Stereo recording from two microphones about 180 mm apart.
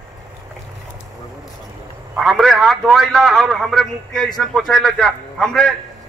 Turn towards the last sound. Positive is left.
turn(degrees=5)  # may be behind; listen again after turning